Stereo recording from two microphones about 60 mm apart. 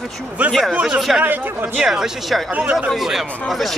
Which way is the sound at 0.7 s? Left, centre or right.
Centre.